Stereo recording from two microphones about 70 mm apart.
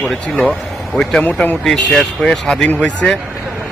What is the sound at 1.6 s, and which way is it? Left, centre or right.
Speech, centre.